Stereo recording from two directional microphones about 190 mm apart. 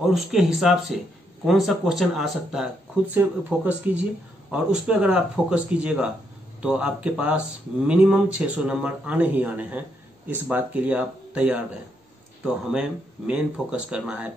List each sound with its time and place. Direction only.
0.0 s speech: centre (ahead or behind)
13.3 s speech: 5° right (ahead or behind)